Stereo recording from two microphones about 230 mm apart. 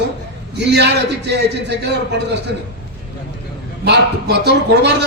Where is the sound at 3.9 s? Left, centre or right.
Right.